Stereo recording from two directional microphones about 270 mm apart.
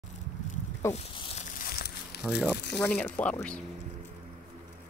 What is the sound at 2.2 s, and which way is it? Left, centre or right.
Speech, centre.